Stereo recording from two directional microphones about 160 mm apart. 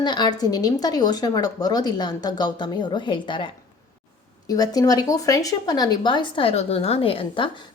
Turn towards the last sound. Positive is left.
turn(degrees=35)  # may be behind; listen again after turning